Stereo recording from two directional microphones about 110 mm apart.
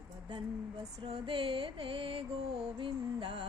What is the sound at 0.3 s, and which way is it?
Speech, 50° right (ahead or behind).